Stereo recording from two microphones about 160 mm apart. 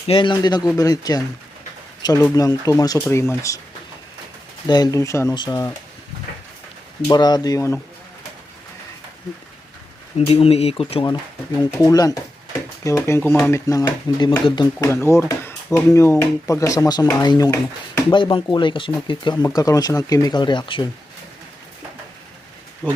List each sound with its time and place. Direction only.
0.1 s speech: 30° left (ahead or behind)
4.7 s speech: 25° left (ahead or behind)
7.1 s speech: 25° left (ahead or behind)
10.2 s speech: 40° left (ahead or behind)